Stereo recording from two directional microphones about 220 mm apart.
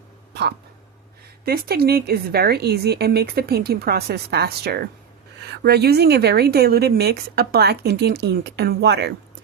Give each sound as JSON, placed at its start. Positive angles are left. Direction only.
{"t": 1.5, "sound": "speech", "side_deg": -45}